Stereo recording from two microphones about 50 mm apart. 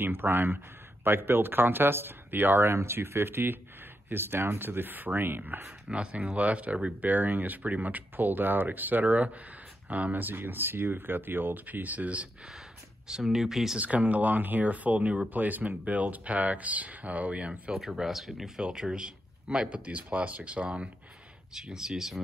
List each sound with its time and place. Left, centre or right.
0.0 s speech: right
2.7 s speech: right
5.9 s speech: right
13.1 s speech: centre
13.7 s speech: right
17.7 s speech: centre
19.8 s speech: right
21.5 s speech: centre